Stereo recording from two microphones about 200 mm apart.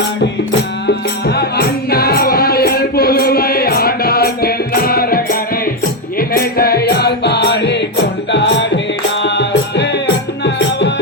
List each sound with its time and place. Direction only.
0.9 s music: 55° left (ahead or behind)